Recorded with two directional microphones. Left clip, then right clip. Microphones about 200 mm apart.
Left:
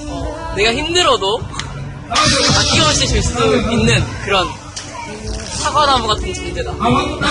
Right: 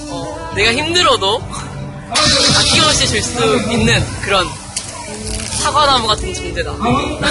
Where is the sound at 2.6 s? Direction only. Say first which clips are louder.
Right 2 dB; centre (ahead or behind).